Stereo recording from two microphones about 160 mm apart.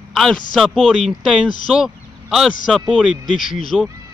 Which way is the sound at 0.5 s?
5° right (ahead or behind).